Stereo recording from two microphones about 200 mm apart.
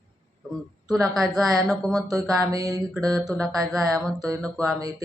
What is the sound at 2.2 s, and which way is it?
Speech, centre (ahead or behind).